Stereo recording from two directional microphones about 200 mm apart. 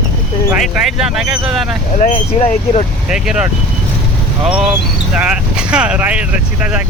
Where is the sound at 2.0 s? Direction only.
40° left (ahead or behind).